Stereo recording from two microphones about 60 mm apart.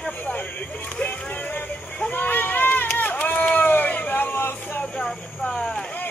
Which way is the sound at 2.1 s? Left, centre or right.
Left.